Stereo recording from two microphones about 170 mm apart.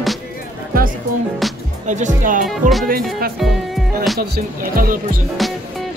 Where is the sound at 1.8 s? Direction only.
45° right (ahead or behind).